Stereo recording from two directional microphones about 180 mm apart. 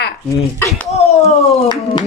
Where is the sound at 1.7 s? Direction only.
25° left (ahead or behind).